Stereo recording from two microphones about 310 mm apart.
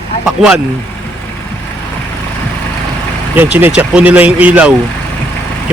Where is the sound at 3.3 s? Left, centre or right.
Centre.